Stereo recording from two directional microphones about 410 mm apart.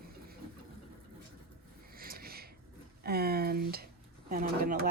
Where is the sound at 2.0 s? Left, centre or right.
Right.